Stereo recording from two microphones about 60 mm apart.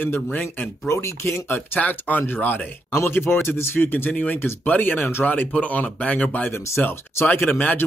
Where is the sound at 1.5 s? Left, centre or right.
Left.